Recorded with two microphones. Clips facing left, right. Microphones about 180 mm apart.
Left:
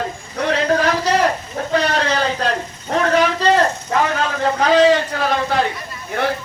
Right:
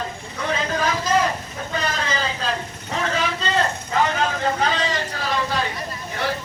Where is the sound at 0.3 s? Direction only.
65° left (ahead or behind).